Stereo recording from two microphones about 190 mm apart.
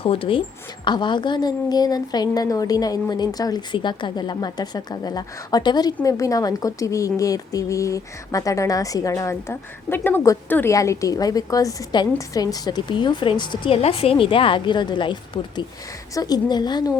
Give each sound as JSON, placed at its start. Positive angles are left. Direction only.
{"t": 0.0, "sound": "a woman's voice", "side_deg": 30}